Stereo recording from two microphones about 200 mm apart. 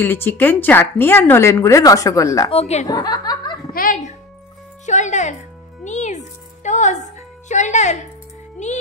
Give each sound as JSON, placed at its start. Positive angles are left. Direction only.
{"t": 0.0, "sound": "speech", "side_deg": 10}
{"t": 2.5, "sound": "speech", "side_deg": 30}
{"t": 2.9, "sound": "speech", "side_deg": 20}
{"t": 3.7, "sound": "a child's voice", "side_deg": 40}